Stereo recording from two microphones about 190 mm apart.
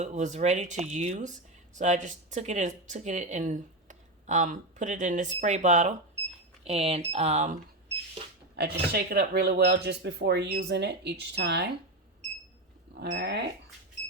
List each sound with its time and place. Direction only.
0.0 s speech: 40° right (ahead or behind)
8.5 s speech: 55° right (ahead or behind)
13.0 s speech: 60° right (ahead or behind)